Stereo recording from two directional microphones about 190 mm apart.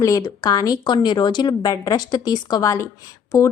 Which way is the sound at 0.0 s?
20° left (ahead or behind).